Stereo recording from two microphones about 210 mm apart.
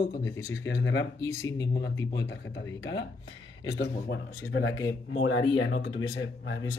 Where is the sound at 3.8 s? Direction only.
55° left (ahead or behind).